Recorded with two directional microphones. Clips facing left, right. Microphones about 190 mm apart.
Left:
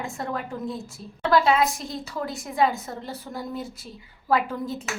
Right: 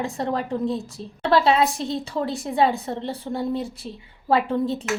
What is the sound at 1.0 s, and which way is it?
A woman's voice, 30° right (ahead or behind).